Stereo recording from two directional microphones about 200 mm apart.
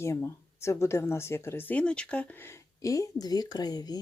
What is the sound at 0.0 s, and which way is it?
Speech, 15° left (ahead or behind).